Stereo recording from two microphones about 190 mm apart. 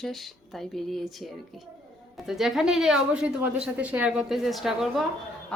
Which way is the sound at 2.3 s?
Centre (ahead or behind).